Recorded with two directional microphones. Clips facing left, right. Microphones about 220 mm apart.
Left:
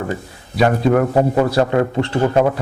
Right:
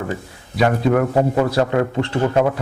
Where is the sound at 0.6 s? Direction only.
35° left (ahead or behind).